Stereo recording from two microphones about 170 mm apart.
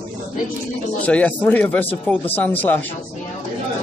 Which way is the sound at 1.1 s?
10° left (ahead or behind).